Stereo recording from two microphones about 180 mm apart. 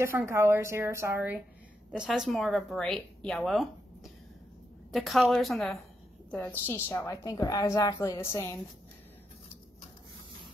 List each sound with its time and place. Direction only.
0.0 s a woman's voice: 15° right (ahead or behind)
6.3 s a woman's voice: 10° left (ahead or behind)